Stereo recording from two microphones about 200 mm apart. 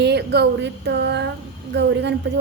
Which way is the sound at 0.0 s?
55° right (ahead or behind).